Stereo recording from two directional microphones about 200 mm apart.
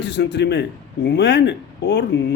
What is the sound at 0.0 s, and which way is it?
Speech, 60° left (ahead or behind).